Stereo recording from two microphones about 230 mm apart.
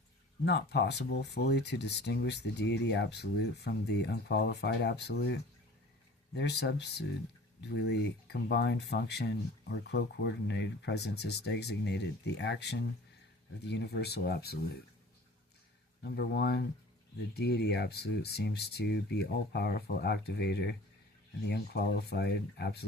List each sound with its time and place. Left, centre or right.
0.4 s speech: left
16.0 s speech: left